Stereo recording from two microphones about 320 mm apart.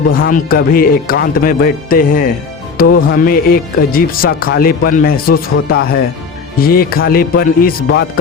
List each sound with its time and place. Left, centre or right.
0.3 s speech: left